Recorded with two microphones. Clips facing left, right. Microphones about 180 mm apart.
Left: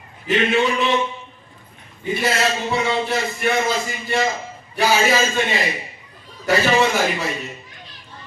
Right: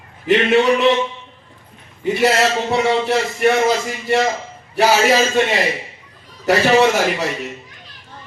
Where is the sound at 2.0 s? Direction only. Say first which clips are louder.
Right 5 dB; 75° right (ahead or behind).